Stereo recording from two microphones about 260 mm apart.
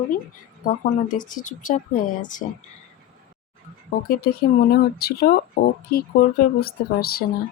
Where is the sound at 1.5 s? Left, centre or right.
Left.